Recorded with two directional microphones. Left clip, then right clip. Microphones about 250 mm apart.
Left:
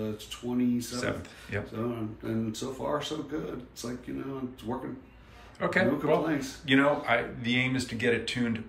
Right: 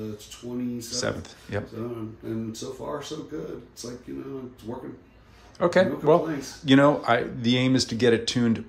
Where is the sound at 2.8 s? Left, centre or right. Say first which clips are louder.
Left 3 dB; centre.